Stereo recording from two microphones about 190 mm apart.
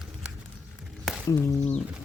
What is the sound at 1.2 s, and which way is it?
Speech, 15° left (ahead or behind).